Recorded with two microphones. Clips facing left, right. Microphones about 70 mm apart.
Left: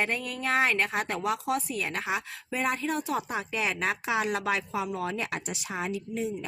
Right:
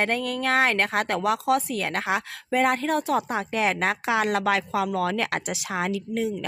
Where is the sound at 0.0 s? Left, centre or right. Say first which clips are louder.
Right 5 dB; right.